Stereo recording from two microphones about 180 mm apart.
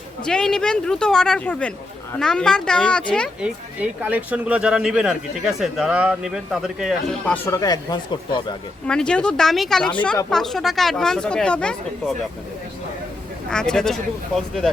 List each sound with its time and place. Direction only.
0.3 s speech: 5° left (ahead or behind)
3.4 s speech: 5° right (ahead or behind)
7.4 s speech: 20° left (ahead or behind)
8.9 s speech: 5° left (ahead or behind)
13.5 s speech: 5° left (ahead or behind)